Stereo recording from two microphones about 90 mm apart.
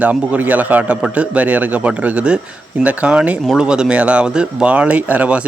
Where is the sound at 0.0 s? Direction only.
15° right (ahead or behind).